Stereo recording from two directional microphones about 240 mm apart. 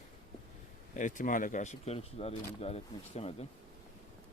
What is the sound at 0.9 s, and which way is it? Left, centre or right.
Speech, left.